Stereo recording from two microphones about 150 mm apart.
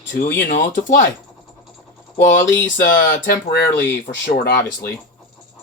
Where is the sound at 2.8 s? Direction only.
80° left.